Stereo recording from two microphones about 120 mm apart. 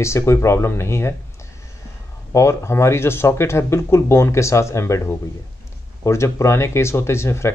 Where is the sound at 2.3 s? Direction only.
25° left (ahead or behind).